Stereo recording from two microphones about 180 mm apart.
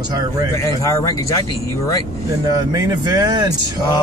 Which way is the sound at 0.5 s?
15° left (ahead or behind).